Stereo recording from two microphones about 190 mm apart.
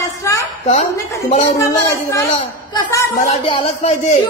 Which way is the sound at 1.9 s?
15° left (ahead or behind).